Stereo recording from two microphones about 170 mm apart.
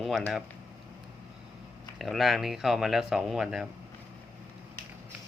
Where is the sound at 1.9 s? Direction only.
Centre (ahead or behind).